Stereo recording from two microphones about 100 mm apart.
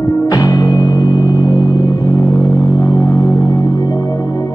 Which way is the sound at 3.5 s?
40° left (ahead or behind).